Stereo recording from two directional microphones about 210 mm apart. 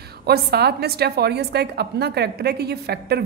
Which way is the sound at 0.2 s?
50° right (ahead or behind).